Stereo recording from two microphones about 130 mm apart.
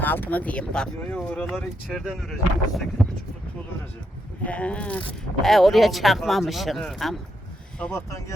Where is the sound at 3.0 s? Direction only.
Centre (ahead or behind).